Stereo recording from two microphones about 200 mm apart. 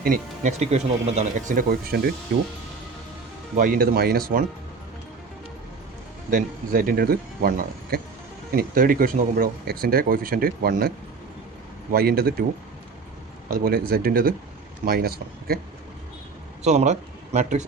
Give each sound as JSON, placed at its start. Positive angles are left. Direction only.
{"t": 0.0, "sound": "speech", "side_deg": -40}
{"t": 3.6, "sound": "speech", "side_deg": -45}
{"t": 6.3, "sound": "speech", "side_deg": -45}
{"t": 13.5, "sound": "speech", "side_deg": -50}
{"t": 16.6, "sound": "speech", "side_deg": -35}